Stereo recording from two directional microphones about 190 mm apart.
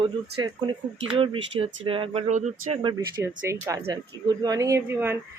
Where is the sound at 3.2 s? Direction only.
15° right (ahead or behind).